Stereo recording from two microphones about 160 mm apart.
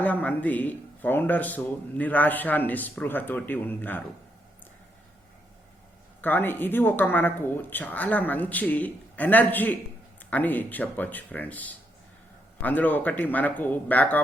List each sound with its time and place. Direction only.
0.0 s speech: 10° left (ahead or behind)
6.2 s speech: 10° left (ahead or behind)